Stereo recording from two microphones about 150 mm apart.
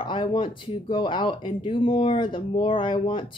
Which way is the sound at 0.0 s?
30° left (ahead or behind).